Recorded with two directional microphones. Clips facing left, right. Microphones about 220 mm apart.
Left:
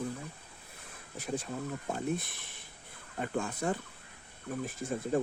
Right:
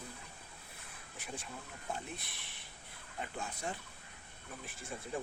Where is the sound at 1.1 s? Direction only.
40° left (ahead or behind).